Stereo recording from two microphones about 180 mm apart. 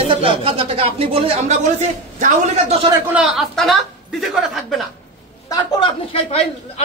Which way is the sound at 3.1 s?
Centre (ahead or behind).